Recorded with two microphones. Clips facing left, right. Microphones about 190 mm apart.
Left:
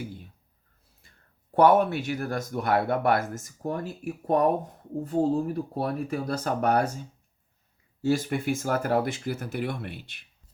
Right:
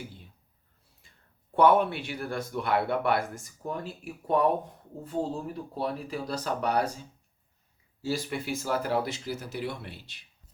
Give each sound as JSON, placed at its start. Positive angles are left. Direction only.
{"t": 1.5, "sound": "speech", "side_deg": 45}
{"t": 8.0, "sound": "speech", "side_deg": 50}